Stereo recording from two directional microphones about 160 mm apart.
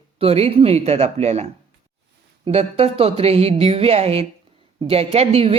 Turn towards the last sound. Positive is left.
turn(degrees=-40)  # may be behind; listen again after turning